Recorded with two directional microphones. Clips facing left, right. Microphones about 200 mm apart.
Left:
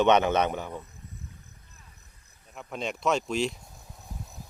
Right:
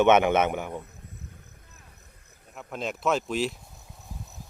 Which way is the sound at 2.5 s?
Centre (ahead or behind).